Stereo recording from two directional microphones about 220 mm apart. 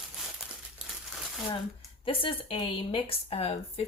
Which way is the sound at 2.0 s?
25° left (ahead or behind).